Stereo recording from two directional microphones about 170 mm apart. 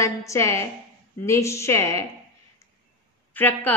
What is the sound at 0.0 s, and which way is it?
A woman's voice, 20° left (ahead or behind).